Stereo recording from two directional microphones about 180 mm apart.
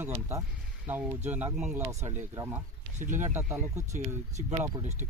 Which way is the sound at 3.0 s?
45° right (ahead or behind).